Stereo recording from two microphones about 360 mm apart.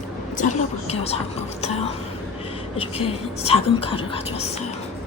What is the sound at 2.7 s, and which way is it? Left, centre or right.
Speech, centre.